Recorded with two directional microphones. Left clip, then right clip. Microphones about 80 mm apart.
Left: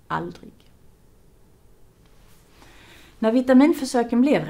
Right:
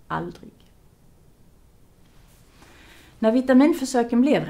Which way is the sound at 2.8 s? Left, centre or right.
Left.